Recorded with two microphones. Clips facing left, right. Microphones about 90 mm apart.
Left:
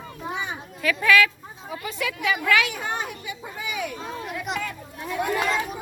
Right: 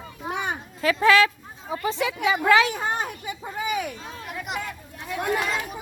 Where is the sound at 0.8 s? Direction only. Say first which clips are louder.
Right 2 dB; 25° right (ahead or behind).